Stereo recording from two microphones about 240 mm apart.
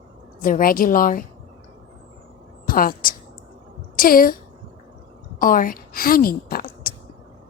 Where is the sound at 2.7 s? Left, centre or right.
Left.